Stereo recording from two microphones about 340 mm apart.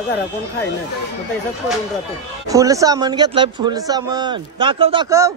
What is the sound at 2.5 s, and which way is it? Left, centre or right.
A man's voice, centre.